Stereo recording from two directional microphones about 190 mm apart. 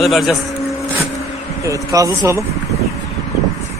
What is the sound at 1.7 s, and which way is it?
Speech, 15° right (ahead or behind).